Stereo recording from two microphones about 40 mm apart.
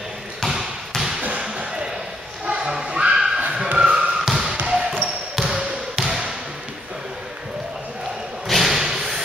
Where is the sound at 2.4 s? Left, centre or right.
Right.